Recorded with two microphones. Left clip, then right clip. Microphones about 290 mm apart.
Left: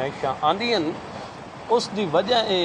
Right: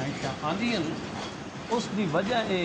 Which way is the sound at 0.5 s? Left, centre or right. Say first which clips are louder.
Left 7 dB; centre.